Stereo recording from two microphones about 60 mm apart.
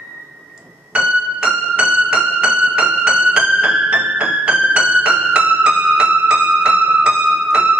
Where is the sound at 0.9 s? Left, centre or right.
Centre.